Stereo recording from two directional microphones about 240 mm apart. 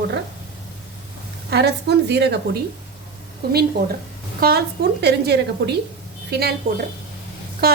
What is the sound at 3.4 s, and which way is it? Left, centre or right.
A woman's voice, right.